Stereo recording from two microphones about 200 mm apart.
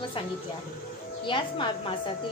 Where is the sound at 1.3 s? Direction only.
25° left (ahead or behind).